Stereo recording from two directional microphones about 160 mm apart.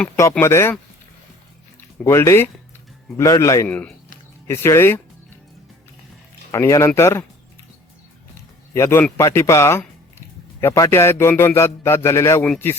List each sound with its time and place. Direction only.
0.2 s speech: 20° left (ahead or behind)
2.0 s speech: 15° left (ahead or behind)
3.7 s speech: 10° left (ahead or behind)
6.5 s speech: 20° left (ahead or behind)
8.7 s speech: 15° left (ahead or behind)